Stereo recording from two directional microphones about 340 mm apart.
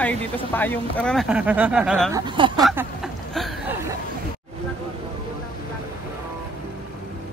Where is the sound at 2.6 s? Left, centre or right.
Centre.